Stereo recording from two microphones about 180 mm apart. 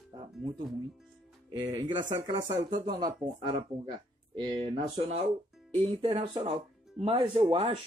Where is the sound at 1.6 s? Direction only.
20° right (ahead or behind).